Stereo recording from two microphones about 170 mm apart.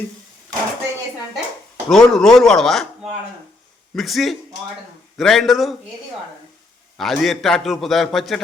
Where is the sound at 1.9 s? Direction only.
5° left (ahead or behind).